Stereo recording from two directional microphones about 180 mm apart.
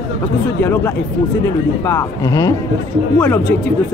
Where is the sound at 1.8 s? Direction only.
15° left (ahead or behind).